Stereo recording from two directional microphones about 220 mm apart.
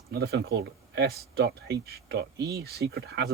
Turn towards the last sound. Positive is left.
turn(degrees=-50)  # may be behind; listen again after turning